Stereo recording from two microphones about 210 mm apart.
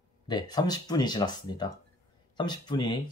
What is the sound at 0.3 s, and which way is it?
Speech, 20° left (ahead or behind).